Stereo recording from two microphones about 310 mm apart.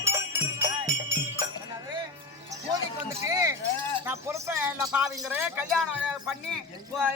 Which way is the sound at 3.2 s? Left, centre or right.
Centre.